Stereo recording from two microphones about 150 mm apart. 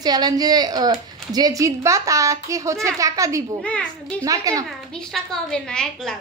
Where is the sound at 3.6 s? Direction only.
5° left (ahead or behind).